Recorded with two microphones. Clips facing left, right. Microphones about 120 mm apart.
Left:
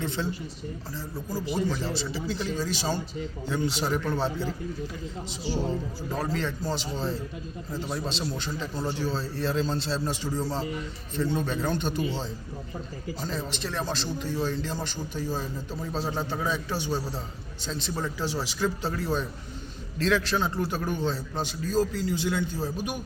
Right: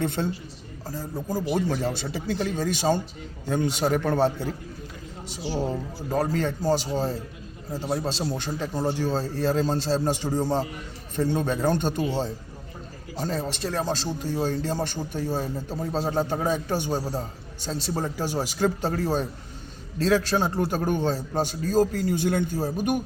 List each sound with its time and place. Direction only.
0.0 s a man's voice: 50° right (ahead or behind)
6.1 s a man's voice: 45° right (ahead or behind)
15.7 s a man's voice: 40° right (ahead or behind)